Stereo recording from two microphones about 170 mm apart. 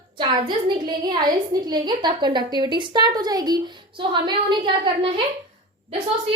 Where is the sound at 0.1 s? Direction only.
25° right (ahead or behind).